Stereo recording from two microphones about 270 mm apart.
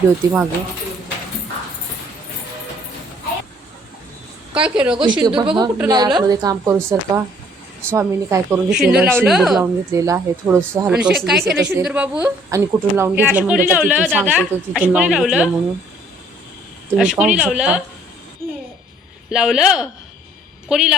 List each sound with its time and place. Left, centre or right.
0.2 s a woman's voice: centre
4.5 s a woman's voice: centre
5.0 s a woman's voice: centre
9.9 s a woman's voice: centre
17.0 s a woman's voice: centre
19.3 s a woman's voice: centre